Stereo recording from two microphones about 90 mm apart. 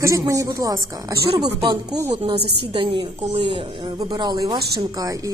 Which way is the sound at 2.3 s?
70° right (ahead or behind).